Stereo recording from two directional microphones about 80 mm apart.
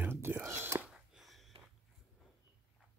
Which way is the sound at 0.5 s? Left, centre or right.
Right.